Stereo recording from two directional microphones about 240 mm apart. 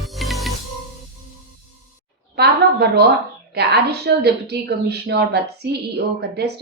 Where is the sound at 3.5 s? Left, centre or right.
Right.